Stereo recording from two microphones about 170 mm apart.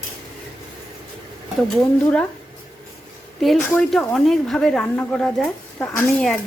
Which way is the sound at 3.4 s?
Centre (ahead or behind).